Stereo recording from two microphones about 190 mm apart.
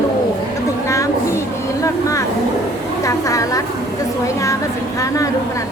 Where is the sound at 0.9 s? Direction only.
15° left (ahead or behind).